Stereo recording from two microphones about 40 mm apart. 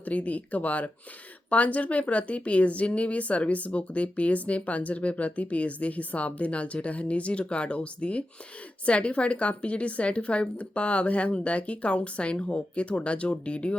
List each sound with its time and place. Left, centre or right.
0.0 s a woman's voice: left